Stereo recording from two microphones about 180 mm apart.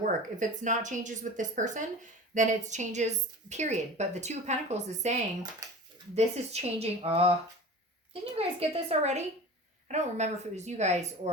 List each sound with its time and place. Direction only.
0.0 s a woman's voice: 45° right (ahead or behind)
8.4 s a woman's voice: 35° right (ahead or behind)